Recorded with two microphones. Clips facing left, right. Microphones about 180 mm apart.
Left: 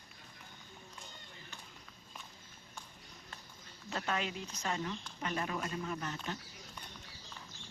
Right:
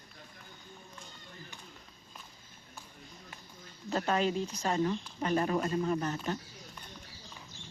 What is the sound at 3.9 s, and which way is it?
Speech, 40° right (ahead or behind).